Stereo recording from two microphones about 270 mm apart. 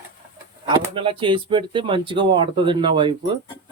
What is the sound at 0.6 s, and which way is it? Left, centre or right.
Speech, centre.